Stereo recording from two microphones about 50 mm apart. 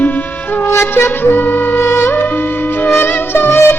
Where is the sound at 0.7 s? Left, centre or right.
Left.